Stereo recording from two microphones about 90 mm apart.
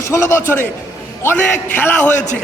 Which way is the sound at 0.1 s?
30° left (ahead or behind).